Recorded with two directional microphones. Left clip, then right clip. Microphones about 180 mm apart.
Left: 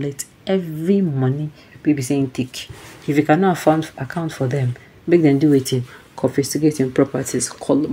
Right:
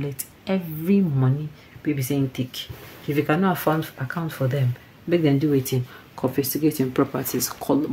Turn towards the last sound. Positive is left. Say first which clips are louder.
# left 4 dB
turn(degrees=10)  # may be behind; listen again after turning